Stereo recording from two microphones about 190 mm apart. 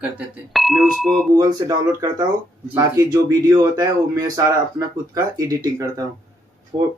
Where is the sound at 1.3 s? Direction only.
20° right (ahead or behind).